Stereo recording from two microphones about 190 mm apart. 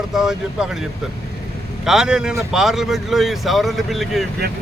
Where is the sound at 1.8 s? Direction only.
5° right (ahead or behind).